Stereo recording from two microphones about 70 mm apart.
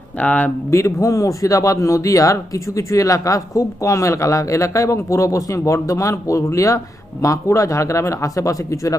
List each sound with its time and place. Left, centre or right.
0.2 s speech: left
0.7 s speech: left